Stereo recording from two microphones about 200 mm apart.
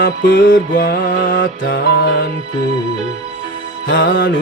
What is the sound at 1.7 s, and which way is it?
Music, 60° left (ahead or behind).